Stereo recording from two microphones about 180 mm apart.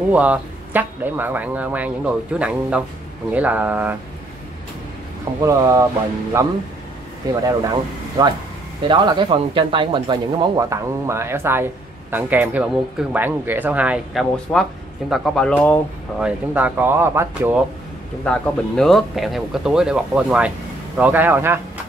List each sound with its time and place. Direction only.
0.1 s speech: 10° right (ahead or behind)
5.4 s speech: 15° right (ahead or behind); by 15.8 s 10° left (ahead or behind)
16.2 s speech: 10° right (ahead or behind)
18.2 s speech: 5° left (ahead or behind); by 21.5 s 10° right (ahead or behind)